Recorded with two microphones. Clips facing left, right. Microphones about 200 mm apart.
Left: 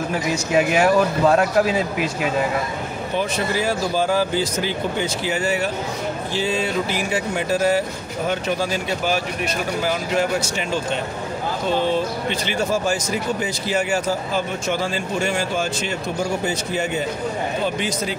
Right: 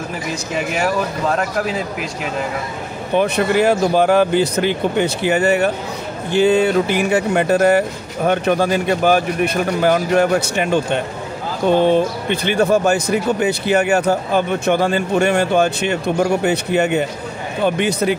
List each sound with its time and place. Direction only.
0.1 s speech: centre (ahead or behind)
3.2 s speech: 60° right (ahead or behind)